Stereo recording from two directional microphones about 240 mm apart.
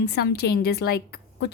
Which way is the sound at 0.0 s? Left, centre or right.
Left.